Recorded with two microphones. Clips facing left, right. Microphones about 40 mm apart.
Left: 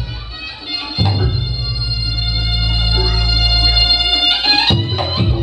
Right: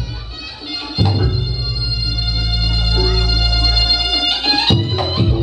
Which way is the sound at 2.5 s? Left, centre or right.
Left.